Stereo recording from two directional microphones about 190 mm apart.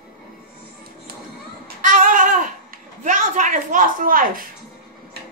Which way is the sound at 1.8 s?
45° right (ahead or behind).